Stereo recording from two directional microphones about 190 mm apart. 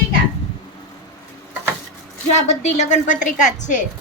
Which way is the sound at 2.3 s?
35° left (ahead or behind).